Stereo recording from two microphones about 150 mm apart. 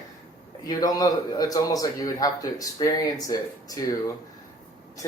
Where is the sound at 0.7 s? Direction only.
25° left (ahead or behind).